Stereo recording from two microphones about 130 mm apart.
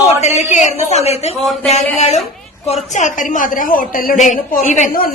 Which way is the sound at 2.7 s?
70° left (ahead or behind).